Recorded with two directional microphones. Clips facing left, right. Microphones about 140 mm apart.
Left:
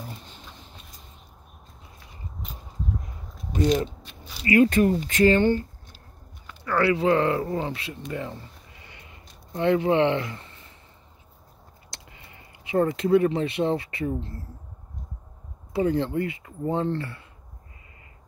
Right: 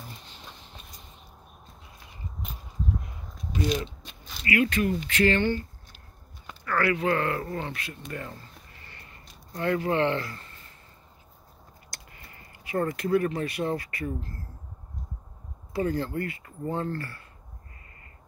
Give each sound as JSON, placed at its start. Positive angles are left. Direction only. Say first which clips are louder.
{"t": 4.2, "sound": "a sound", "louder": "left 4 dB", "side_deg": 10}
{"t": 4.5, "sound": "speech", "louder": "left 6 dB", "side_deg": 45}
{"t": 6.6, "sound": "speech", "louder": "left 4 dB", "side_deg": 25}
{"t": 12.2, "sound": "speech", "louder": "left 1 dB", "side_deg": 15}
{"t": 15.7, "sound": "speech", "louder": "left 4 dB", "side_deg": 20}